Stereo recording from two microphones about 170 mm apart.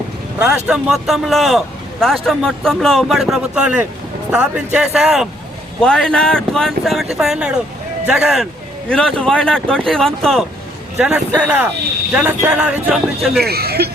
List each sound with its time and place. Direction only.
0.3 s a man's voice: 5° right (ahead or behind)
13.4 s speech: 65° right (ahead or behind)